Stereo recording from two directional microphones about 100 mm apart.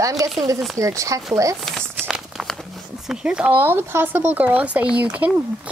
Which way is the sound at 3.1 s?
10° right (ahead or behind).